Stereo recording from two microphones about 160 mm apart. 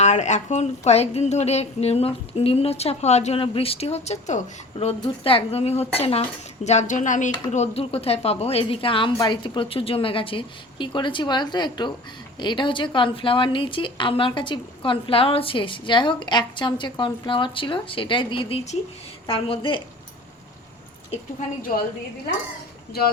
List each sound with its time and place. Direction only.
0.0 s a woman's voice: 45° left (ahead or behind); by 19.8 s 30° left (ahead or behind)
22.9 s speech: 70° left (ahead or behind)